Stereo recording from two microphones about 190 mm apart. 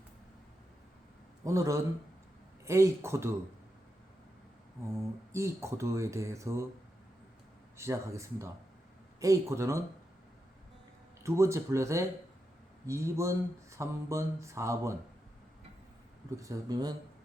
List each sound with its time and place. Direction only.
1.5 s speech: 15° right (ahead or behind)
5.3 s speech: 15° right (ahead or behind)
7.8 s speech: 15° right (ahead or behind)
11.2 s speech: 15° right (ahead or behind)
16.4 s speech: 20° right (ahead or behind)